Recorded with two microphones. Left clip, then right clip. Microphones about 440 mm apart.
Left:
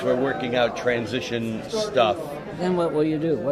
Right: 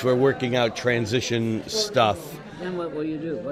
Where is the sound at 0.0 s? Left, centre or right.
Right.